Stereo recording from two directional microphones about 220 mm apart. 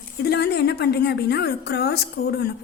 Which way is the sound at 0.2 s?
45° left (ahead or behind).